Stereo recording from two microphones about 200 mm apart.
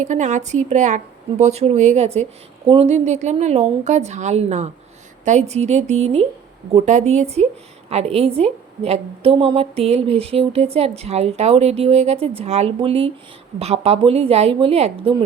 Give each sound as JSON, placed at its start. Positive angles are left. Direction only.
{"t": 0.0, "sound": "a woman's voice", "side_deg": -35}